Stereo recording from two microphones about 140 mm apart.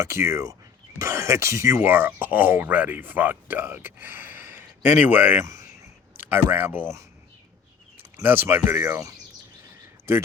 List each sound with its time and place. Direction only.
0.0 s speech: 20° right (ahead or behind)
8.1 s speech: 15° right (ahead or behind)